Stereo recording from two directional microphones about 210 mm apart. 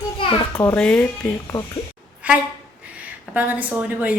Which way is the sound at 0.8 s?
5° left (ahead or behind).